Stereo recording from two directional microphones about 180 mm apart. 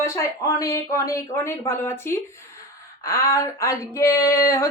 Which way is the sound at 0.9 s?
15° left (ahead or behind).